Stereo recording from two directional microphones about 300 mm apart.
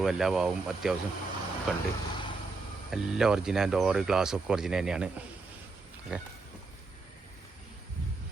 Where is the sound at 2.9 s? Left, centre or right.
Centre.